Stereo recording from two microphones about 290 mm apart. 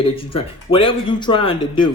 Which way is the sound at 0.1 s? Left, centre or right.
Centre.